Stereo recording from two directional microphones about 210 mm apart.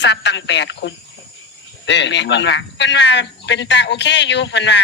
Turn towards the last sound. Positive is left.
turn(degrees=55)  # may be behind; listen again after turning